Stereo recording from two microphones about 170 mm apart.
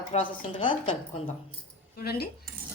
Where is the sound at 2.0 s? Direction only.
65° left (ahead or behind).